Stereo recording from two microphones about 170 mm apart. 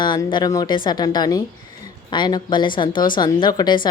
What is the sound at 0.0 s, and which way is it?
A woman's voice, 25° left (ahead or behind).